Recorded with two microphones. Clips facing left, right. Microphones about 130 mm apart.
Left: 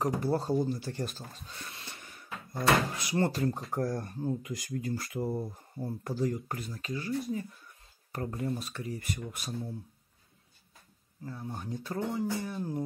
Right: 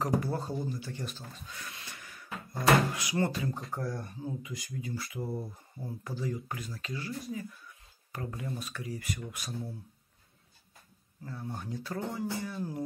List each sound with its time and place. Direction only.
0.2 s speech: 35° left (ahead or behind)
1.5 s a sound: 30° left (ahead or behind)
2.5 s speech: 30° left (ahead or behind)
6.6 s speech: 25° left (ahead or behind)
8.1 s speech: 40° left (ahead or behind)
11.2 s speech: 15° left (ahead or behind)